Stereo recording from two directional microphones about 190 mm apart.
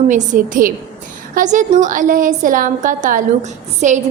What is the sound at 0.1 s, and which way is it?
A woman's voice, 40° right (ahead or behind).